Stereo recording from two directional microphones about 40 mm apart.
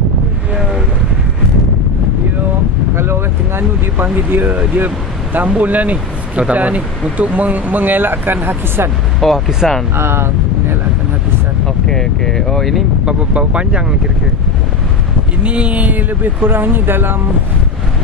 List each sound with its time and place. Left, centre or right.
3.0 s vehicle: right
4.1 s speech: right
9.2 s speech: centre
9.9 s speech: right
11.6 s speech: centre
13.0 s speech: right
15.4 s speech: right
16.2 s speech: right